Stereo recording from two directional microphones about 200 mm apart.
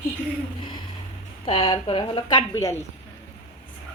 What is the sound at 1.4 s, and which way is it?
A woman's voice, 25° left (ahead or behind).